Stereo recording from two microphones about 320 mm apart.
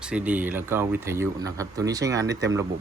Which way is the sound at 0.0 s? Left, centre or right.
Centre.